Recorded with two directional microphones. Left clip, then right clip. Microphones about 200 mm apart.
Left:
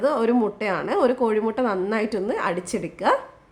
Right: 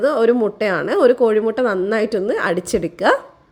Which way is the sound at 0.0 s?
15° right (ahead or behind).